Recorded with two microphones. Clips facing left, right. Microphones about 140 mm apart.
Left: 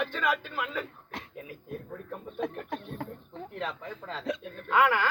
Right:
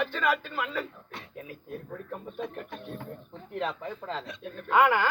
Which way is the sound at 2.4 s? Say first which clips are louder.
Left 3 dB; 75° left (ahead or behind).